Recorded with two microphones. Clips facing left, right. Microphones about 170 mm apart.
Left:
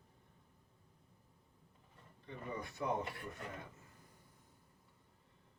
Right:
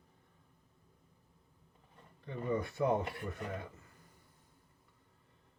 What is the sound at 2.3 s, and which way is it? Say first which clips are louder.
Speech: right 9 dB; 60° right (ahead or behind).